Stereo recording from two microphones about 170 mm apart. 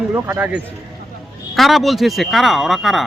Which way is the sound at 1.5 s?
Centre (ahead or behind).